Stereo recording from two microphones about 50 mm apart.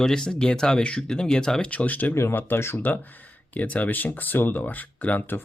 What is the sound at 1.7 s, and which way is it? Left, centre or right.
Speech, left.